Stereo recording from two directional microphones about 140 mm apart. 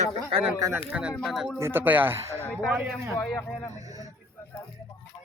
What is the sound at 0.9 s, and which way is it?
Speech, 5° right (ahead or behind).